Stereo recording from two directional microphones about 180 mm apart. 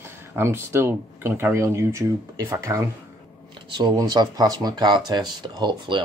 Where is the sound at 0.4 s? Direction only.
15° right (ahead or behind).